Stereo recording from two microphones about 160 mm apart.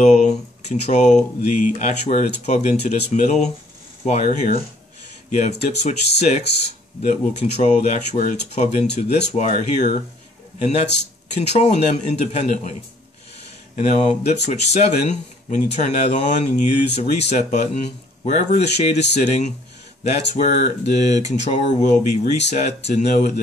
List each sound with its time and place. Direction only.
0.0 s speech: 45° left (ahead or behind)
5.6 s speech: 90° left
6.1 s speech: 45° left (ahead or behind)
13.7 s speech: 45° left (ahead or behind)